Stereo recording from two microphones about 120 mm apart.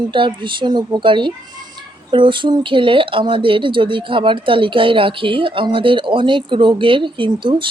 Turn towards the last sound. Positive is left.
turn(degrees=-45)  # may be behind; listen again after turning